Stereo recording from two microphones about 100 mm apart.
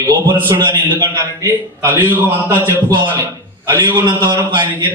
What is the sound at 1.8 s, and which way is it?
Speech, 25° right (ahead or behind).